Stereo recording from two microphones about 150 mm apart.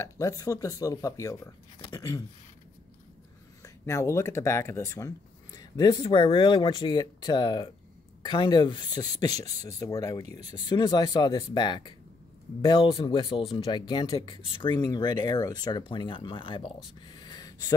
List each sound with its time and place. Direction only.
0.0 s speech: 20° left (ahead or behind)
3.6 s speech: 20° left (ahead or behind)